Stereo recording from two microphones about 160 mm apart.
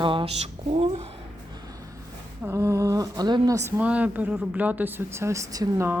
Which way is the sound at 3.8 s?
10° right (ahead or behind).